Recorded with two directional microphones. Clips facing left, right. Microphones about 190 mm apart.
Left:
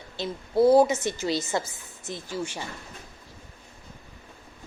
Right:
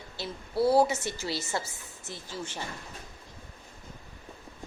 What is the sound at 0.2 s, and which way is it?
A woman's voice, 20° left (ahead or behind).